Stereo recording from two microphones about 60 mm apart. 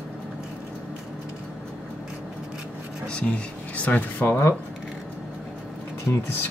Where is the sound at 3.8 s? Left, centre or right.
Left.